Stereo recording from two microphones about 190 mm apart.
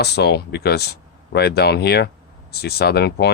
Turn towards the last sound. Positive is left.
turn(degrees=60)  # may be behind; listen again after turning